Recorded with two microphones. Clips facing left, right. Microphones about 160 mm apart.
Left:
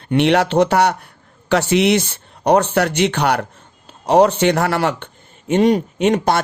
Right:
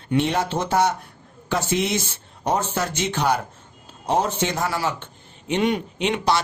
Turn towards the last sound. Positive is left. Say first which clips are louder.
# left 6 dB
turn(degrees=50)  # may be behind; listen again after turning